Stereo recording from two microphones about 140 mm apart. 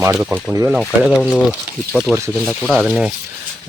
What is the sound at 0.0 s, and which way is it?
Speech, 20° right (ahead or behind).